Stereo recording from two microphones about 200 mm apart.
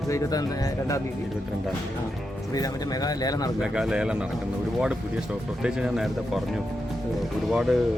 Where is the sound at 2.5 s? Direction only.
20° left (ahead or behind).